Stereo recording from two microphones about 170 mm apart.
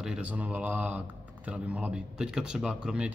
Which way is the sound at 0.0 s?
5° right (ahead or behind).